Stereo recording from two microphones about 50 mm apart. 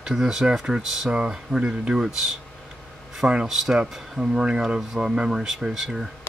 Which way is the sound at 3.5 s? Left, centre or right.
Centre.